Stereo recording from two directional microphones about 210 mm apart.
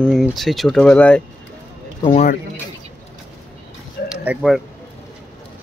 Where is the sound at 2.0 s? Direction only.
30° left (ahead or behind).